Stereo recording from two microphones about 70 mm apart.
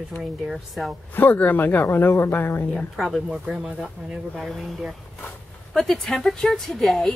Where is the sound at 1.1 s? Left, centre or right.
Left.